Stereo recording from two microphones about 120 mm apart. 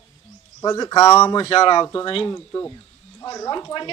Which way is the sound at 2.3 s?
15° left (ahead or behind).